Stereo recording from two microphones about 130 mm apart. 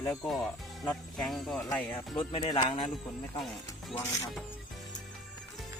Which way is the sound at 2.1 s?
40° left (ahead or behind).